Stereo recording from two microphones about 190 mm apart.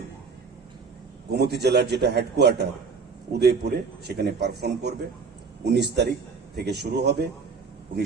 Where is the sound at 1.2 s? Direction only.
60° right (ahead or behind).